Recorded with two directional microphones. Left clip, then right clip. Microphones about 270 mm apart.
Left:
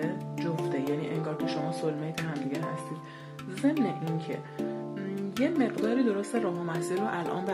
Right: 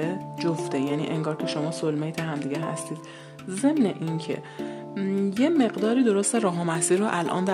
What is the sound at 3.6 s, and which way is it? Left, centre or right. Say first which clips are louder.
Speech: right 5 dB; right.